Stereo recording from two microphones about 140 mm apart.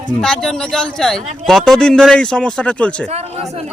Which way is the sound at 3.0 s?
50° right (ahead or behind).